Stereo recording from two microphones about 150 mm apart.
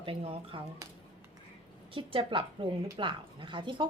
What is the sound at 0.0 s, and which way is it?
Speech, 35° right (ahead or behind).